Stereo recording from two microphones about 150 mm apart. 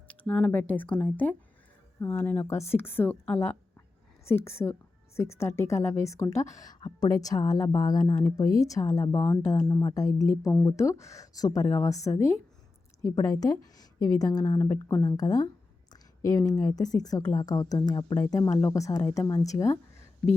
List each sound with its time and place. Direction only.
0.1 s a woman's voice: 10° left (ahead or behind)
15.9 s a sound: 25° left (ahead or behind)
16.5 s a woman's voice: 25° left (ahead or behind)